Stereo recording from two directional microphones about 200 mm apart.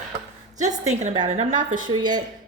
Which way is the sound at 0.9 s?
35° right (ahead or behind).